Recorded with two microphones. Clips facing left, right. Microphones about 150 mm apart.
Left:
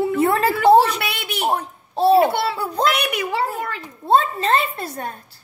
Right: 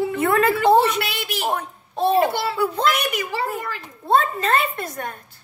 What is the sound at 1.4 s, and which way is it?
Speech, 35° left (ahead or behind).